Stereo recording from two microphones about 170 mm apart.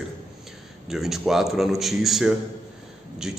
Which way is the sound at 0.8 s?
Centre (ahead or behind).